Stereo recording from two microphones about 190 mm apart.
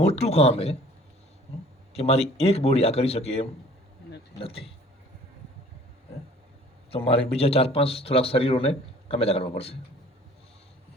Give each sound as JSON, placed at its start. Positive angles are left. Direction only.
{"t": 0.0, "sound": "a man's voice", "side_deg": 35}
{"t": 1.9, "sound": "a man's voice", "side_deg": 35}
{"t": 6.9, "sound": "a man's voice", "side_deg": 30}